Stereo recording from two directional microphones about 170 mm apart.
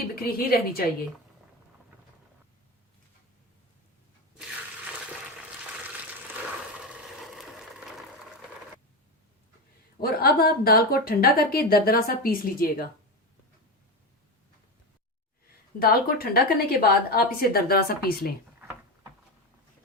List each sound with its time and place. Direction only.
0.2 s a woman's voice: 65° left (ahead or behind)
6.7 s vehicle: 5° right (ahead or behind)
10.0 s a woman's voice: 65° left (ahead or behind)
15.8 s a woman's voice: 60° left (ahead or behind)